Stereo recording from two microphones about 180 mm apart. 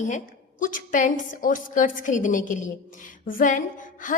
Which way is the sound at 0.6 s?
50° left (ahead or behind).